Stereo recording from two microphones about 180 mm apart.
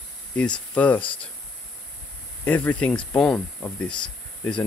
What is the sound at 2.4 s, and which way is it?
Speech, 10° left (ahead or behind).